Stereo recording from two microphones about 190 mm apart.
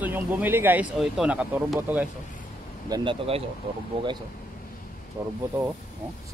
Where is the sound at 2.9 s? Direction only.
25° right (ahead or behind).